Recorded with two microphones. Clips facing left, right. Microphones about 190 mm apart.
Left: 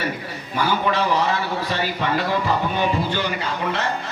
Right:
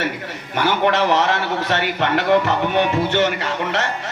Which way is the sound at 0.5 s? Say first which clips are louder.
Right 3 dB; 70° right (ahead or behind).